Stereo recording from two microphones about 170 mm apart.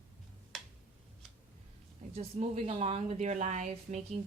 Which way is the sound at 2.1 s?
40° right (ahead or behind).